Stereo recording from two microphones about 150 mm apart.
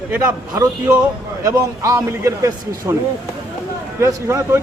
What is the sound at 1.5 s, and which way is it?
A man's voice, 20° right (ahead or behind).